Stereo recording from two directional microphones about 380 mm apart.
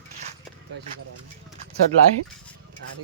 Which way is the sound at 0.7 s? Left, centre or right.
Right.